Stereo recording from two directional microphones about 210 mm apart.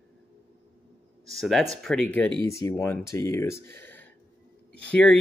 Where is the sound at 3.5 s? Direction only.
50° right (ahead or behind).